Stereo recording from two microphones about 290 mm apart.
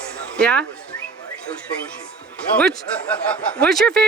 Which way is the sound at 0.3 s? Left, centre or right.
Centre.